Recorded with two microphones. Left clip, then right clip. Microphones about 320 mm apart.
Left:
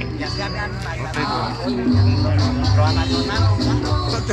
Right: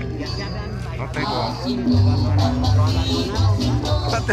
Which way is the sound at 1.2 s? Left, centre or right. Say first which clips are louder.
Even; right.